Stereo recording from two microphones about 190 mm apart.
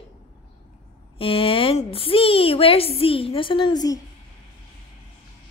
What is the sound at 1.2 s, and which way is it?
A child's voice, 30° left (ahead or behind).